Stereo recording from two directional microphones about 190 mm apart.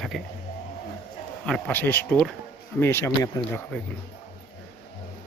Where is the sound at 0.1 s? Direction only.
Centre (ahead or behind).